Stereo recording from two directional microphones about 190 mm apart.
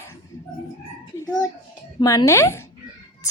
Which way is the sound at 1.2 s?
20° left (ahead or behind).